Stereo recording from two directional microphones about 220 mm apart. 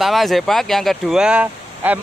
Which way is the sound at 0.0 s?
Centre (ahead or behind).